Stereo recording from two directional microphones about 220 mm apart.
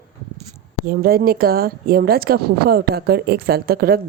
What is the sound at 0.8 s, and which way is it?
Speech, 40° right (ahead or behind).